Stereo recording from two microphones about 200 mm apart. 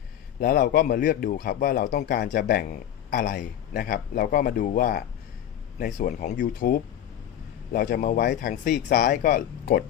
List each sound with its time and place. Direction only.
0.3 s a man's voice: 45° left (ahead or behind)
6.3 s a man's voice: 55° left (ahead or behind)